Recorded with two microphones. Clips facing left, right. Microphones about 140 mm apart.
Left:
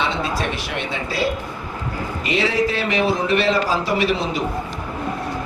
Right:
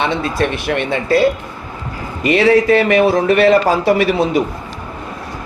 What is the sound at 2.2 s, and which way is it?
A man's voice, 60° right (ahead or behind).